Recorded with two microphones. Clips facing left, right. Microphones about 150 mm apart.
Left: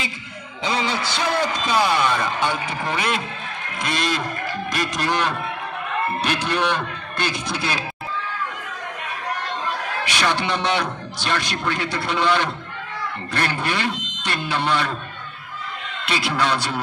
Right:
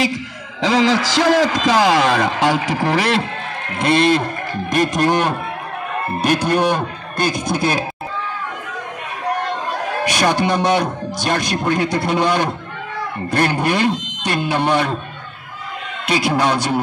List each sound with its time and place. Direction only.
0.6 s a man's voice: 90° right; by 3.3 s 75° right (ahead or behind)
3.8 s speech: 60° right (ahead or behind)
9.3 s a man's voice: 50° right (ahead or behind)
16.1 s speech: 45° right (ahead or behind)